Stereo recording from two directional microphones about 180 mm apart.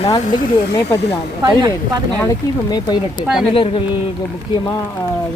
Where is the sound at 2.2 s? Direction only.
20° left (ahead or behind).